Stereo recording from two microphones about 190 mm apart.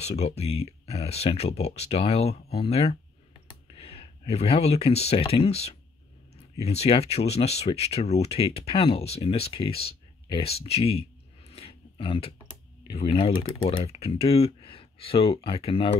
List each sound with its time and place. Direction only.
0.0 s speech: 35° left (ahead or behind)